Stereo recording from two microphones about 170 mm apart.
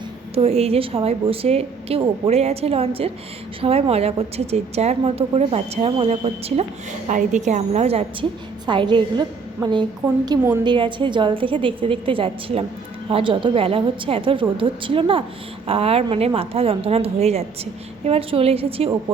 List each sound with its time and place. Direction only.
0.3 s a woman's voice: 35° right (ahead or behind)
10.2 s a woman's voice: 20° right (ahead or behind)